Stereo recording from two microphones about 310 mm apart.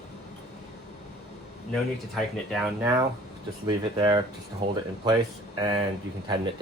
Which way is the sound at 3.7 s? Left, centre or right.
Centre.